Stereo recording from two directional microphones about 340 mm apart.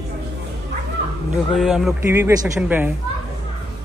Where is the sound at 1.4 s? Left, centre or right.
Centre.